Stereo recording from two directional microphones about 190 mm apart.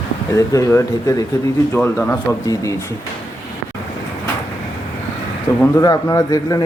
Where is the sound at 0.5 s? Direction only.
15° left (ahead or behind).